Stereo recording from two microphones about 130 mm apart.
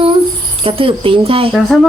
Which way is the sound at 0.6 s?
45° right (ahead or behind).